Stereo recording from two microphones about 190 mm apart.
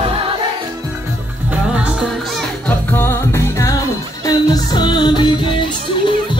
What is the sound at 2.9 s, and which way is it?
Music, 10° left (ahead or behind).